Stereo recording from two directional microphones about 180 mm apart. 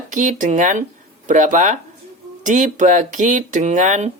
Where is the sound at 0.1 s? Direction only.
45° right (ahead or behind).